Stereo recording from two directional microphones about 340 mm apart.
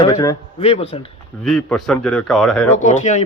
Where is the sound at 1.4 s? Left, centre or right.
Centre.